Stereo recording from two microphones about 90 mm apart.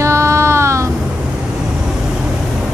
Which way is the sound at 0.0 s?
35° right (ahead or behind).